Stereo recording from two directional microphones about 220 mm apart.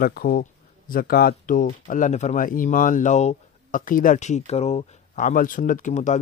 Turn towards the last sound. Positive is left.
turn(degrees=35)  # may be behind; listen again after turning